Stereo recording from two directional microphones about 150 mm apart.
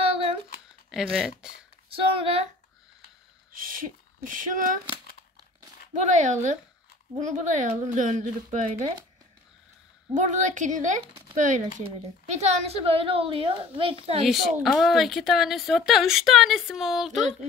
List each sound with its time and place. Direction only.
1.1 s a woman's voice: 5° right (ahead or behind)
1.9 s a child's voice: 40° right (ahead or behind)
3.5 s speech: 70° right (ahead or behind)
5.9 s speech: 55° right (ahead or behind)
10.1 s a child's voice: 55° right (ahead or behind); by 14.2 s 40° right (ahead or behind)
14.2 s a woman's voice: centre (ahead or behind)